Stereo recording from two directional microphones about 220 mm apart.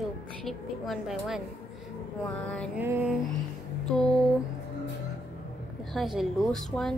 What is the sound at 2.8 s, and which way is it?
Music, 10° right (ahead or behind).